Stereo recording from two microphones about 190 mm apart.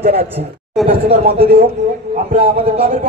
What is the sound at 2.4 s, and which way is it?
Speech, 30° right (ahead or behind).